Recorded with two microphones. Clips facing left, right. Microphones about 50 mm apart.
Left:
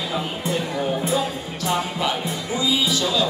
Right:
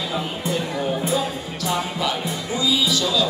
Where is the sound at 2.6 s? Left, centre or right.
Left.